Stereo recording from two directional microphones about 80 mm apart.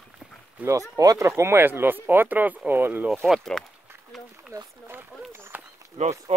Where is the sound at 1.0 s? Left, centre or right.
Right.